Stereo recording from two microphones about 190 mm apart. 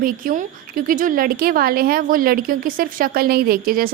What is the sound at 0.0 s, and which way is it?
A woman's voice, 45° right (ahead or behind).